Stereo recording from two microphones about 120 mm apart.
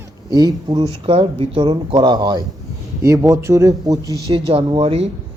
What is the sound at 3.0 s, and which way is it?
Speech, 25° right (ahead or behind).